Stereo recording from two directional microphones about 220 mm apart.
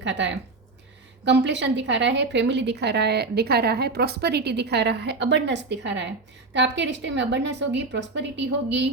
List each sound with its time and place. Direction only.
0.0 s a woman's voice: 55° right (ahead or behind)